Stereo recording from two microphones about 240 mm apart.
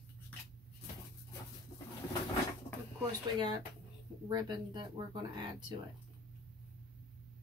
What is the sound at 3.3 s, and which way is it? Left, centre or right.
Speech, centre.